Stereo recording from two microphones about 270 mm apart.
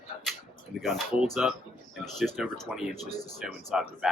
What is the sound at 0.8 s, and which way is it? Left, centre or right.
Speech, centre.